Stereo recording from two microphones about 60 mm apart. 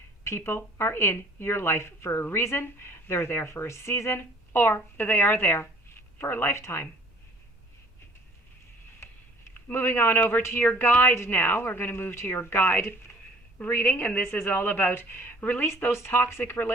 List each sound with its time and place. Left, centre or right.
0.3 s speech: left
4.2 s speech: left
9.0 s a sound: left
9.6 s speech: left
13.9 s a woman's voice: left
14.2 s speech: left
15.6 s speech: left